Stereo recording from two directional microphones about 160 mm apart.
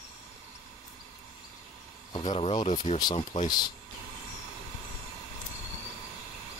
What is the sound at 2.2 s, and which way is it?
Speech, 40° left (ahead or behind).